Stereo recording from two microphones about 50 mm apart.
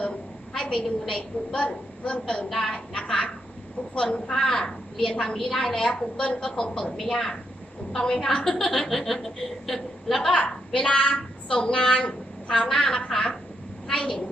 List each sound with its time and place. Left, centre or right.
0.5 s a woman's voice: centre
2.5 s a woman's voice: centre
2.7 s a woman's voice: left
8.4 s a woman's voice: centre